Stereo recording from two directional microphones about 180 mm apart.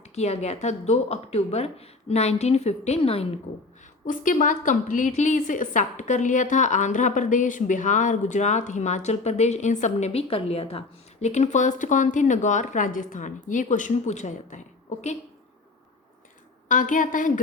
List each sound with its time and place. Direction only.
0.1 s a woman's voice: 35° left (ahead or behind)
4.0 s a woman's voice: 45° left (ahead or behind)
16.6 s a woman's voice: 45° left (ahead or behind)